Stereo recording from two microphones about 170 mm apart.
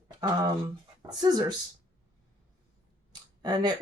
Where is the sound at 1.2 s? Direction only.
25° right (ahead or behind).